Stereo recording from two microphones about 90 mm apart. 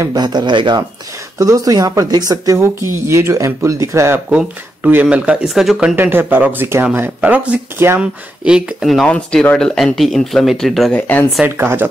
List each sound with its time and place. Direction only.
0.1 s speech: 50° right (ahead or behind)
1.4 s a woman's voice: 40° right (ahead or behind)
4.3 s speech: 15° right (ahead or behind)
5.9 s speech: 25° right (ahead or behind)
8.0 s speech: 10° right (ahead or behind)
9.0 s speech: 10° left (ahead or behind)
10.9 s speech: 20° left (ahead or behind)
11.4 s speech: 25° right (ahead or behind)